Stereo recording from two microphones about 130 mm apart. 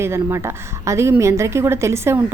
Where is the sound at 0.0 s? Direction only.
20° right (ahead or behind).